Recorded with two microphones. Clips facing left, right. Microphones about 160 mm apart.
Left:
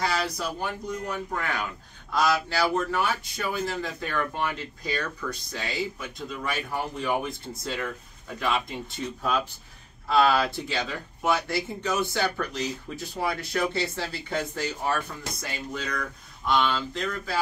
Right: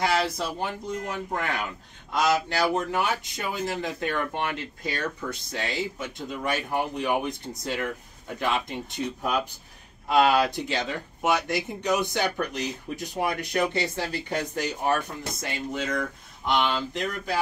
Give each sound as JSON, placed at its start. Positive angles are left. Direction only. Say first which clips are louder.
{"t": 0.0, "sound": "speech", "louder": "right 3 dB", "side_deg": -25}